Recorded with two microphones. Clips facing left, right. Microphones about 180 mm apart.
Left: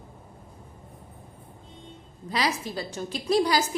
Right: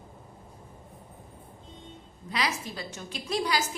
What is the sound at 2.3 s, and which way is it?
A woman's voice, 35° left (ahead or behind).